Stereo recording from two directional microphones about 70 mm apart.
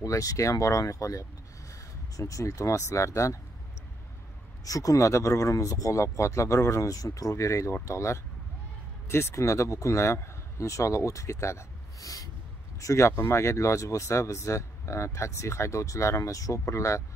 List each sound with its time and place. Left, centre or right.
0.0 s speech: left
4.6 s a man's voice: left
12.8 s speech: left